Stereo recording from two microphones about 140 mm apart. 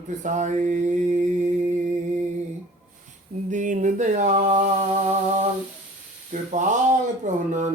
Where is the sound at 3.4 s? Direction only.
60° right (ahead or behind).